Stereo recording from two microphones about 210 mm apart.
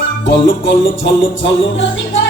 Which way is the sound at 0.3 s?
55° left (ahead or behind).